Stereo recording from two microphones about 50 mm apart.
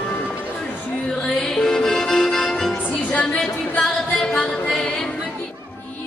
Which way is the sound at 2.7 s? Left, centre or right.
Left.